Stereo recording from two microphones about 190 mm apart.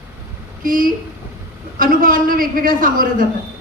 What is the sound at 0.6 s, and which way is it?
A woman's voice, 45° right (ahead or behind).